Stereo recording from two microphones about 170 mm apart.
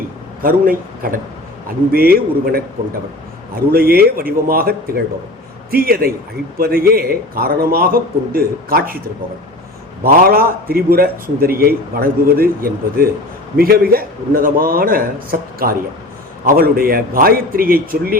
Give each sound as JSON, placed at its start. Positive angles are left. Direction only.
{"t": 0.4, "sound": "a man's voice", "side_deg": -55}
{"t": 3.7, "sound": "a man's voice", "side_deg": -60}
{"t": 10.0, "sound": "a man's voice", "side_deg": -60}